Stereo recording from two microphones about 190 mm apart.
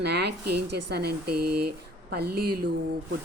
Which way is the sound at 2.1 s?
55° right (ahead or behind).